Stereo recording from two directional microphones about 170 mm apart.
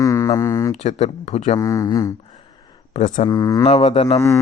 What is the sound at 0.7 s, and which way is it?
Speech, 40° left (ahead or behind).